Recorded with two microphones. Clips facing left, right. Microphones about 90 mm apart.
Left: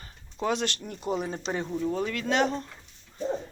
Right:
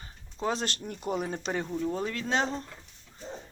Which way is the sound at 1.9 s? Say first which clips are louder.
Left 4 dB; 30° right (ahead or behind).